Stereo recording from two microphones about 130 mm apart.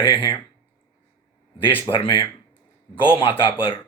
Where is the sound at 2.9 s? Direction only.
25° left (ahead or behind).